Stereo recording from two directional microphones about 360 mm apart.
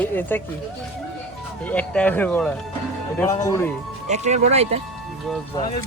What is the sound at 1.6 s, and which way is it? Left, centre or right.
Speech, centre.